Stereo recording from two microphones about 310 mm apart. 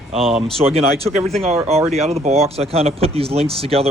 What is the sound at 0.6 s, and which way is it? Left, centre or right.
Speech, centre.